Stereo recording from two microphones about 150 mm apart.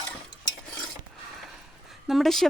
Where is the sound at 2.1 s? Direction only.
Centre (ahead or behind).